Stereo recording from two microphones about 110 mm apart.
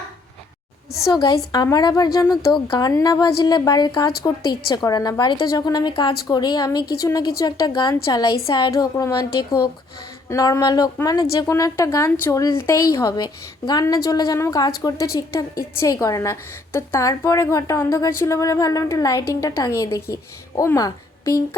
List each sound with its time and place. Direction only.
1.0 s a woman's voice: 35° left (ahead or behind)